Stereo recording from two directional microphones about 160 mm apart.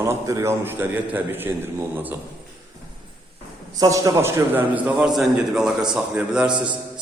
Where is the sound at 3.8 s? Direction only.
20° right (ahead or behind).